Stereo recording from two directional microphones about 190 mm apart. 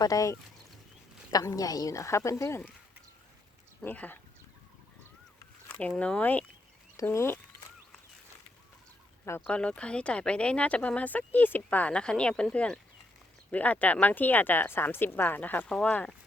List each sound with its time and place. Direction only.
0.0 s speech: 20° left (ahead or behind)
3.8 s speech: 10° left (ahead or behind)
5.8 s speech: 5° left (ahead or behind)
9.4 s speech: 5° left (ahead or behind)